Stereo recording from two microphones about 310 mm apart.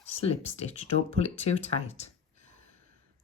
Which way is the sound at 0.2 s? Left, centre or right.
Centre.